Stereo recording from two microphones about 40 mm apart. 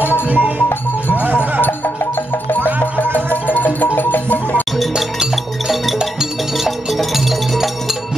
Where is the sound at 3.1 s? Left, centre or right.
Left.